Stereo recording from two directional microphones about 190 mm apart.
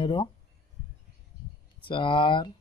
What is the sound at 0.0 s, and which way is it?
Speech, 25° left (ahead or behind).